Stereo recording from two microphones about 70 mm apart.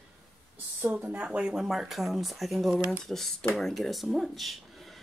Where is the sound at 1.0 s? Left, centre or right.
Right.